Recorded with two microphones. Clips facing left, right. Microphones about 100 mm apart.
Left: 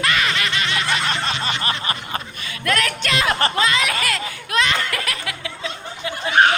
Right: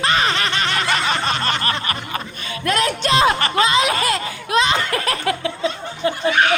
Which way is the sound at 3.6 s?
20° right (ahead or behind).